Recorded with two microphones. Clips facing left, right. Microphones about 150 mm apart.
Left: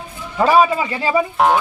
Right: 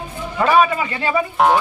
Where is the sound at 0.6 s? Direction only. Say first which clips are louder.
Left 2 dB; 15° left (ahead or behind).